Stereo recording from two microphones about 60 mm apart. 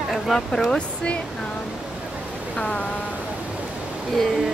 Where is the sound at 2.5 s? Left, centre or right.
Centre.